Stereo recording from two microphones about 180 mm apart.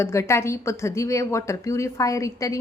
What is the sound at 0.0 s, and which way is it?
A woman's voice, 15° left (ahead or behind).